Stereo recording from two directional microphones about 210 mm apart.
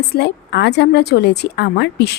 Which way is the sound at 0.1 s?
55° left (ahead or behind).